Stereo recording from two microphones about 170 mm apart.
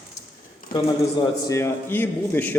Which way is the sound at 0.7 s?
55° left (ahead or behind).